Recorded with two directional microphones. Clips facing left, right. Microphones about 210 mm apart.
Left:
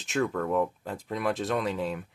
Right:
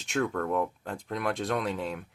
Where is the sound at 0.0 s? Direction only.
Centre (ahead or behind).